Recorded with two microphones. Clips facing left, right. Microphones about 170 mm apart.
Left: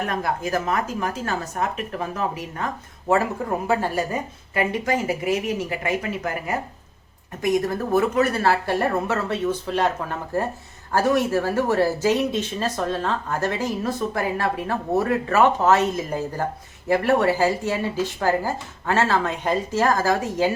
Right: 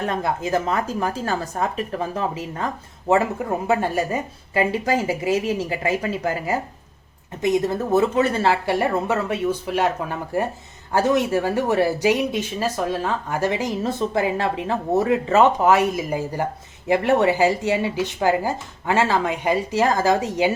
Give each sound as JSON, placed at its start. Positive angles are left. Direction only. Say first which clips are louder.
{"t": 0.0, "sound": "speech", "louder": "right 1 dB", "side_deg": -25}
{"t": 3.7, "sound": "speech", "louder": "right 3 dB", "side_deg": -25}
{"t": 10.9, "sound": "speech", "louder": "right 1 dB", "side_deg": -20}